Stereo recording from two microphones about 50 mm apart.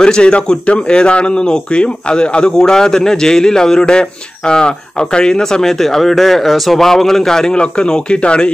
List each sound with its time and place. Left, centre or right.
0.0 s a man's voice: centre